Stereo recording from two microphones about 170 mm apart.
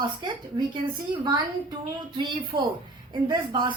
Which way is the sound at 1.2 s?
25° right (ahead or behind).